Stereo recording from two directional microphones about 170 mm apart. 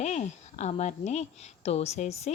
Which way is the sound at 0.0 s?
40° left (ahead or behind).